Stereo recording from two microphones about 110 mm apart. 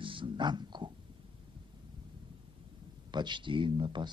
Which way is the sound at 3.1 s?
45° right (ahead or behind).